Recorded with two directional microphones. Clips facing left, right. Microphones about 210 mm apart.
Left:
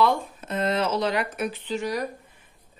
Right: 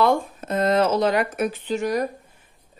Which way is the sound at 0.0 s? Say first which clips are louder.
Right 3 dB; 45° right (ahead or behind).